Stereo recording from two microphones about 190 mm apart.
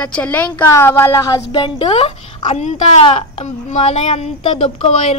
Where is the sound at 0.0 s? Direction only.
5° left (ahead or behind).